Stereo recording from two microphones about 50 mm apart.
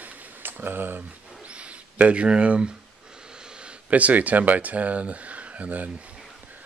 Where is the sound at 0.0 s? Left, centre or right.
Right.